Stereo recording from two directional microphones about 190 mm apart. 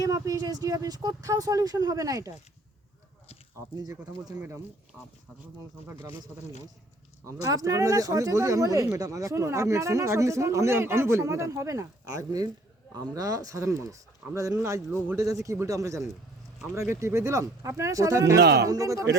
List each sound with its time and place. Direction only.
0.0 s speech: 20° right (ahead or behind)
3.8 s speech: 20° right (ahead or behind); by 5.1 s 5° right (ahead or behind)
5.9 s speech: 15° right (ahead or behind)
7.4 s speech: 15° right (ahead or behind)
18.3 s speech: 65° right (ahead or behind)
18.6 s speech: 15° right (ahead or behind)